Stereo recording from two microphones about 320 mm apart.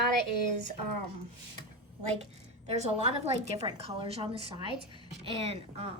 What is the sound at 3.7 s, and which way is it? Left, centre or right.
A woman's voice, centre.